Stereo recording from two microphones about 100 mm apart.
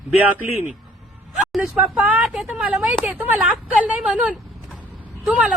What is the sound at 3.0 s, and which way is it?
Speech, 15° right (ahead or behind).